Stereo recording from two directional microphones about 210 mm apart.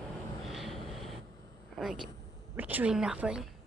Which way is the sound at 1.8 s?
Centre (ahead or behind).